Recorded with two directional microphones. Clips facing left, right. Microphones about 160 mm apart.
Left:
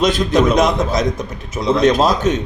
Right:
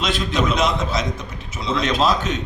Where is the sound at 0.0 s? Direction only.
45° left (ahead or behind).